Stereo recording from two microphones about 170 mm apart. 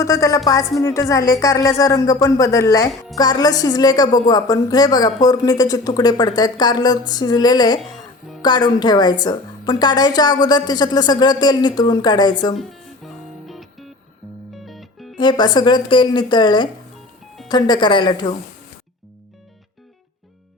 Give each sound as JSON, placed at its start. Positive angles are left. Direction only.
{"t": 0.0, "sound": "a woman's voice", "side_deg": 20}
{"t": 13.5, "sound": "music", "side_deg": 0}
{"t": 15.2, "sound": "a woman's voice", "side_deg": 25}